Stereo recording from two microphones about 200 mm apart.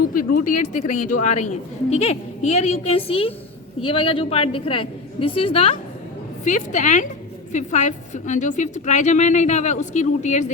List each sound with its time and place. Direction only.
0.1 s a woman's voice: 45° left (ahead or behind)